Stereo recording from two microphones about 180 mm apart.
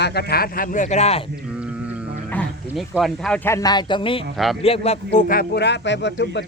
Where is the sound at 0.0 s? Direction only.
65° left (ahead or behind); by 1.2 s 40° left (ahead or behind).